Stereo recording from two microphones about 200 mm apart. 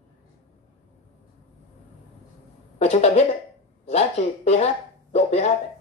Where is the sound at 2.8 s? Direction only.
35° left (ahead or behind).